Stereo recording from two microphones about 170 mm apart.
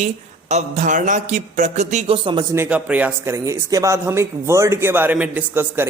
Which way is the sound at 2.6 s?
10° right (ahead or behind).